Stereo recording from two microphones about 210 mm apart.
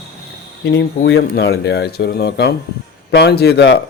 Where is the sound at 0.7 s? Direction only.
55° left (ahead or behind).